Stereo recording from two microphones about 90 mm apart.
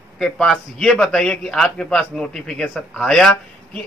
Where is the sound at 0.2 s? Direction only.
5° left (ahead or behind).